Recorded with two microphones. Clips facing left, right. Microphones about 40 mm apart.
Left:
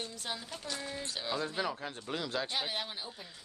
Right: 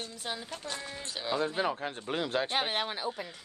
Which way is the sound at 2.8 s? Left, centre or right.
Right.